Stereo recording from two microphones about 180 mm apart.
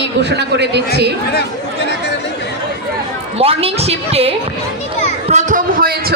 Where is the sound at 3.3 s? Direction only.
30° right (ahead or behind).